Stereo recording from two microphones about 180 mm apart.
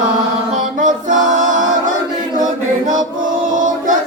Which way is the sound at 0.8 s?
45° right (ahead or behind).